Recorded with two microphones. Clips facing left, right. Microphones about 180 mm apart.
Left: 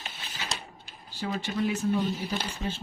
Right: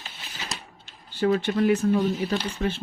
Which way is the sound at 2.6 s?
70° right (ahead or behind).